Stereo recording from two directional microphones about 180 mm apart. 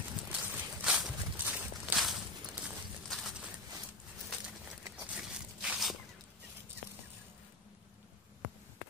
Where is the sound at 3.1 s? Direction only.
Centre (ahead or behind).